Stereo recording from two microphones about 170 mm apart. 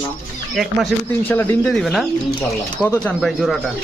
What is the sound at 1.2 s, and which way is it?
Speech, 10° left (ahead or behind).